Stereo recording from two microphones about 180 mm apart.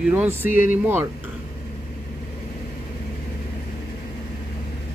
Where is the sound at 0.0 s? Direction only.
10° right (ahead or behind).